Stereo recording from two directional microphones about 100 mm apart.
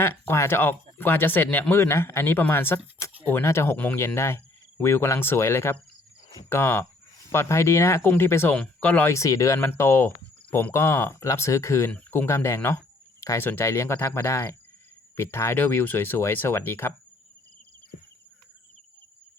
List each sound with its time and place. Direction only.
0.0 s speech: 25° left (ahead or behind)
9.0 s speech: 30° left (ahead or behind)
11.9 s speech: 15° left (ahead or behind)
12.2 s speech: 25° left (ahead or behind)